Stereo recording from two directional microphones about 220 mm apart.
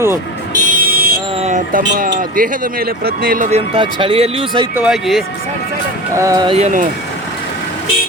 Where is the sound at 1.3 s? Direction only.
30° right (ahead or behind).